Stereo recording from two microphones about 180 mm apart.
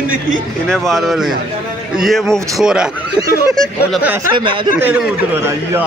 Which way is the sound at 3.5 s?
Centre (ahead or behind).